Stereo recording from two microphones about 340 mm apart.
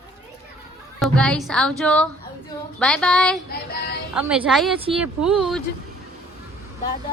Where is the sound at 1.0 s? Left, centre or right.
Centre.